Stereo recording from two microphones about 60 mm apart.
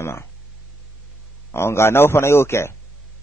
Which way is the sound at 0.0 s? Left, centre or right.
Left.